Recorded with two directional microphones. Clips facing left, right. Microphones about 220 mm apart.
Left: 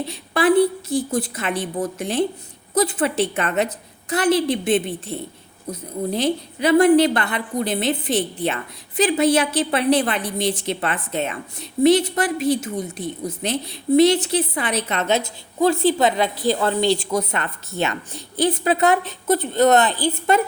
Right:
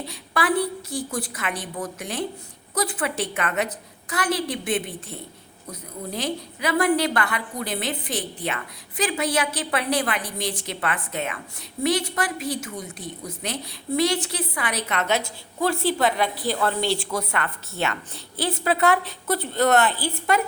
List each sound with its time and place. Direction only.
0.0 s a woman's voice: 25° left (ahead or behind)